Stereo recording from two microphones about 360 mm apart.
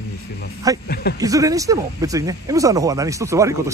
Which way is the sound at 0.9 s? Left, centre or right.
Left.